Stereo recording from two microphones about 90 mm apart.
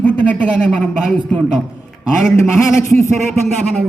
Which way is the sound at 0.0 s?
15° left (ahead or behind).